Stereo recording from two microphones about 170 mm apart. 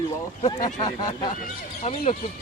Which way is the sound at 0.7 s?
25° left (ahead or behind).